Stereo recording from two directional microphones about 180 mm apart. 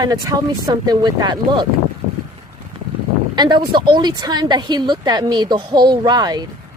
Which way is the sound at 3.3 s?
25° right (ahead or behind).